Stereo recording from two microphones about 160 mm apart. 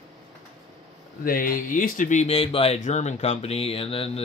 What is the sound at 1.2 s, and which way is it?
Speech, 60° left (ahead or behind).